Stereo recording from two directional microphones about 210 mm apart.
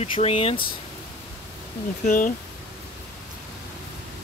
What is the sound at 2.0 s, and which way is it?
Speech, 40° left (ahead or behind).